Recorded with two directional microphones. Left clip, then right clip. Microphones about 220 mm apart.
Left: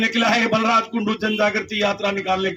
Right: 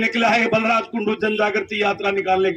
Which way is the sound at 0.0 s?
15° right (ahead or behind).